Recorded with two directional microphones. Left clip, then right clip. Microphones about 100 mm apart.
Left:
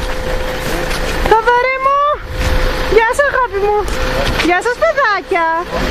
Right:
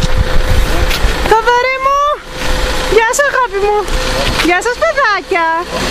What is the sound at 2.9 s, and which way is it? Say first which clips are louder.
Vehicle: right 1 dB; 30° right (ahead or behind).